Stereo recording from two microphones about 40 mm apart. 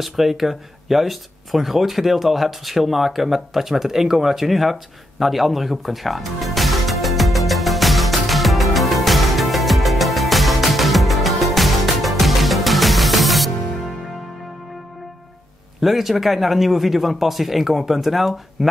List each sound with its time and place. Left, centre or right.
0.0 s speech: centre
5.2 s music: centre
15.8 s speech: centre